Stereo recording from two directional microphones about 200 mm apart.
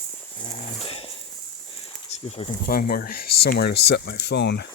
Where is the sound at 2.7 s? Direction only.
50° left (ahead or behind).